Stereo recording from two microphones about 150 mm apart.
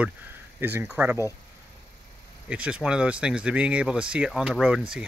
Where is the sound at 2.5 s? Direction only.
5° right (ahead or behind).